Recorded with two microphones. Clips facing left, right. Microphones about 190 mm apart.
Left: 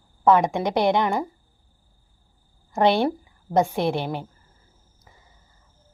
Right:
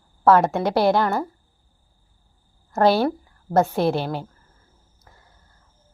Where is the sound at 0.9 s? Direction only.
15° left (ahead or behind).